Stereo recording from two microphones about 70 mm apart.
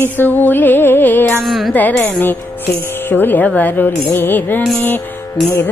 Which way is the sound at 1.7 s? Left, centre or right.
Left.